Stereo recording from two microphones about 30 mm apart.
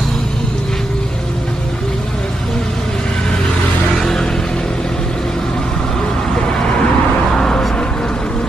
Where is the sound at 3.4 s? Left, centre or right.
Centre.